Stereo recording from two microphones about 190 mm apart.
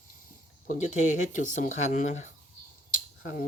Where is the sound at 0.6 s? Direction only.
40° left (ahead or behind).